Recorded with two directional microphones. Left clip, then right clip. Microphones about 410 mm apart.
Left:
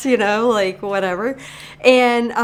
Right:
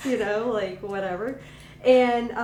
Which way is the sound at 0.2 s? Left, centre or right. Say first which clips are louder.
Left 9 dB; left.